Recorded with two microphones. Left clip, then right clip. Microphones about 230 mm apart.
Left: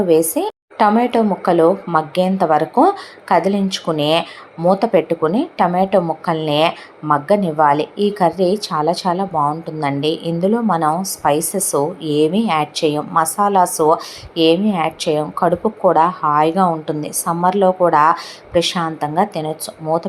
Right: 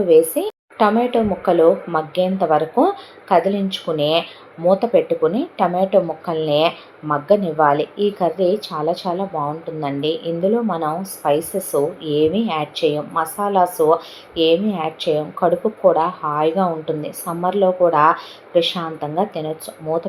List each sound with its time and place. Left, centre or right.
0.1 s speech: left